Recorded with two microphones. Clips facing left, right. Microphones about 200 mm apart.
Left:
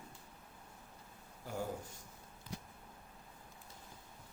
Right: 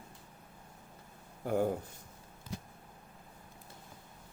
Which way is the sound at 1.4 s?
55° right (ahead or behind).